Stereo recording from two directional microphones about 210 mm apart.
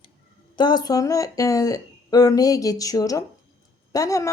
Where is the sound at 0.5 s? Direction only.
20° left (ahead or behind).